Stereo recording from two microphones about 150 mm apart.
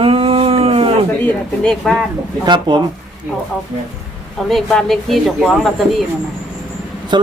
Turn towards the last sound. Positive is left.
turn(degrees=-30)  # may be behind; listen again after turning